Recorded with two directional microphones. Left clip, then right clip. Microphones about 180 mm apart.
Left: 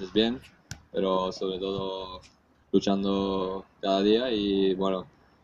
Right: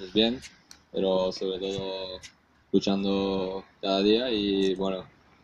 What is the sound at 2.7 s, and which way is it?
Speech, 30° right (ahead or behind).